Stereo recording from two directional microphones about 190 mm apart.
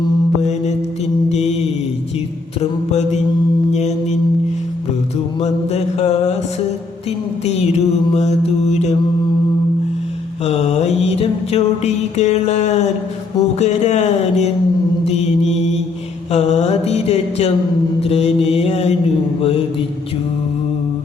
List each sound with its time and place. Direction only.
1.3 s mantra: 35° left (ahead or behind)
2.6 s mantra: 35° left (ahead or behind)
5.4 s mantra: 35° left (ahead or behind)
7.4 s mantra: 35° left (ahead or behind)
10.4 s a sound: 35° left (ahead or behind)
13.6 s speech: 35° left (ahead or behind)
15.0 s mantra: 35° left (ahead or behind)